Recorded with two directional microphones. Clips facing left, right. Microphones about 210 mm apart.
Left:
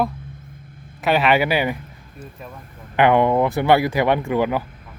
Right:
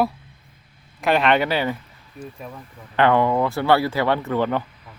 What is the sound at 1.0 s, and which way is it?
Speech, 5° left (ahead or behind).